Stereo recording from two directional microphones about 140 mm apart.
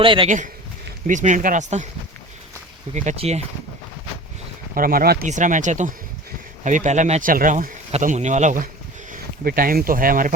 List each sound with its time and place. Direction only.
0.0 s a man's voice: 40° right (ahead or behind)
1.0 s speech: 60° right (ahead or behind)
2.9 s speech: 60° right (ahead or behind)
4.7 s speech: 90° right
8.0 s speech: 60° right (ahead or behind)
9.4 s speech: 90° right